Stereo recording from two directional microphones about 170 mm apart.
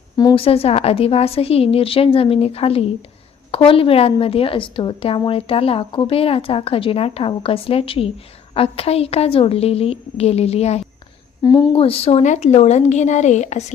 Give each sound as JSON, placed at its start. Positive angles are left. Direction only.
{"t": 0.2, "sound": "a woman's voice", "side_deg": 30}
{"t": 11.4, "sound": "a woman's voice", "side_deg": 25}